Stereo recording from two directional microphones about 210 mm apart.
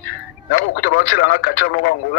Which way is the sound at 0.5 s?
45° left (ahead or behind).